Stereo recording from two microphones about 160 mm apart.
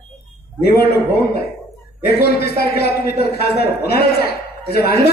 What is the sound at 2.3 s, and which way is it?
A man's voice, 80° left.